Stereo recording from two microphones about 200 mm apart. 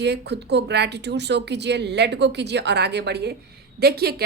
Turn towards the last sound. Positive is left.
turn(degrees=-50)  # may be behind; listen again after turning